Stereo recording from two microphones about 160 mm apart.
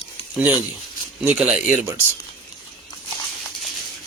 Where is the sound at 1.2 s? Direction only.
5° right (ahead or behind).